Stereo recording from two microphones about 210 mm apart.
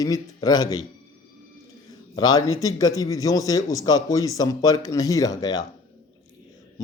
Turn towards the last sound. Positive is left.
turn(degrees=20)  # may be behind; listen again after turning